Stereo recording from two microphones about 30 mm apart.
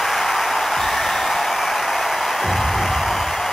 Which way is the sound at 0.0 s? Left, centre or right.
Centre.